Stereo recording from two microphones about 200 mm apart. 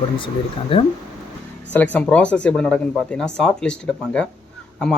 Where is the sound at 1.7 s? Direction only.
10° left (ahead or behind).